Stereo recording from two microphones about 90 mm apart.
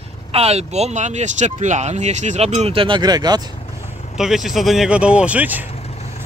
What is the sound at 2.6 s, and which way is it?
Speech, 80° right.